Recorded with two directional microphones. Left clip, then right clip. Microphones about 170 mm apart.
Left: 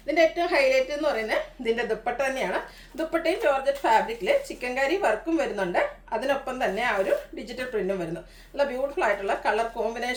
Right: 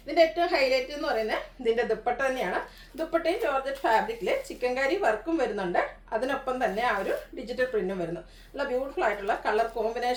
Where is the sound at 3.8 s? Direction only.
15° left (ahead or behind).